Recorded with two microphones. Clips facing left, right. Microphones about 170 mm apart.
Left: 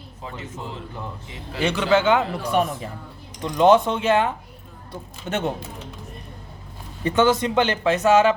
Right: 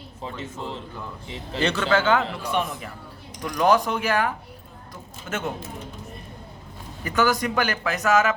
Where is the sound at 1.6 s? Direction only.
10° left (ahead or behind).